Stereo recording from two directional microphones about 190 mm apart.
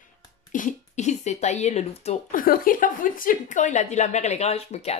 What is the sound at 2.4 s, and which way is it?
A woman's voice, 45° left (ahead or behind).